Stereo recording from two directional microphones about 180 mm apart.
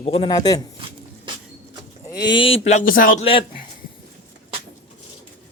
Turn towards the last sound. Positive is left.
turn(degrees=30)  # may be behind; listen again after turning